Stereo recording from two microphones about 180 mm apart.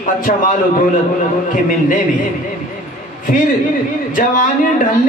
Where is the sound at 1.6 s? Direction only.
45° left (ahead or behind).